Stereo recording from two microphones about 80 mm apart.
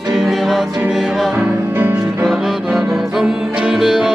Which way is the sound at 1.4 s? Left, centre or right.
Right.